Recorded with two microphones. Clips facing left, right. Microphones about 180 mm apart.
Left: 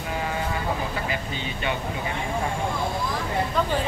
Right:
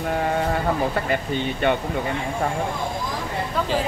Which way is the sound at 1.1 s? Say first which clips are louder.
Right 7 dB; 55° right (ahead or behind).